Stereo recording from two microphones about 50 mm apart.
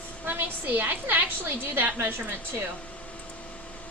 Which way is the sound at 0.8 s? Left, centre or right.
Right.